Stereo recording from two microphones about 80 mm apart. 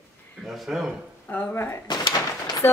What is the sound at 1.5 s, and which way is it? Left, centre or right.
Speech, left.